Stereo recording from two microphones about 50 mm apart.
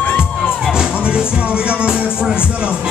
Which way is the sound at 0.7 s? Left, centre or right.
Centre.